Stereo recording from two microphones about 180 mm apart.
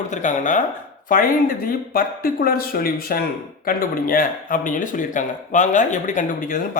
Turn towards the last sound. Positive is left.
turn(degrees=45)  # may be behind; listen again after turning